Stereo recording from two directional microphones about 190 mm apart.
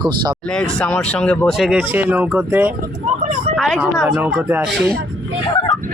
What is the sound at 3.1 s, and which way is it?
Speech, 40° right (ahead or behind).